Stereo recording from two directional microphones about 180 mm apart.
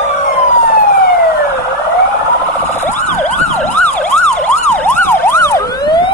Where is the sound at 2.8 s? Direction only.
10° left (ahead or behind).